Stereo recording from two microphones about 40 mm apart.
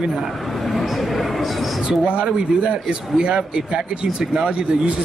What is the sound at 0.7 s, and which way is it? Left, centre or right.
Speech, centre.